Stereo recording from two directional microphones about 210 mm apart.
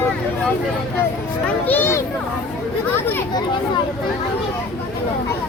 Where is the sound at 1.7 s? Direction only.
10° left (ahead or behind).